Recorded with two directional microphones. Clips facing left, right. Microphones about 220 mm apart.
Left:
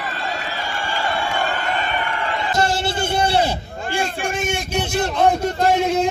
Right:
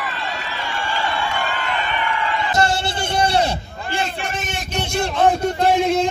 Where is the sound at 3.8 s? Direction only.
45° left (ahead or behind).